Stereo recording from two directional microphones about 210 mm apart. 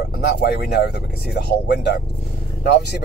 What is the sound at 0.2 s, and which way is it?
Speech, 50° left (ahead or behind).